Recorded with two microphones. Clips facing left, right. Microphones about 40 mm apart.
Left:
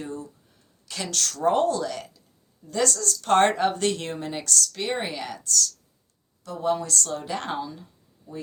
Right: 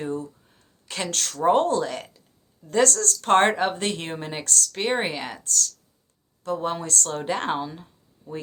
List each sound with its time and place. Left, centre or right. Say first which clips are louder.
0.0 s a sound: right 5 dB; right
0.9 s speech: right 1 dB; right
1.3 s speech: right 3 dB; centre
1.5 s speech: right 2 dB; right
3.5 s speech: left 1 dB; centre; by 7.9 s right